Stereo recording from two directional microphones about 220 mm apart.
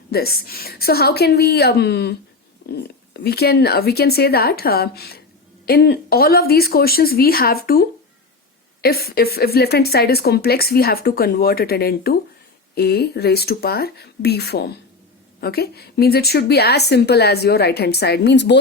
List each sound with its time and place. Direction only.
0.1 s a woman's voice: 45° left (ahead or behind)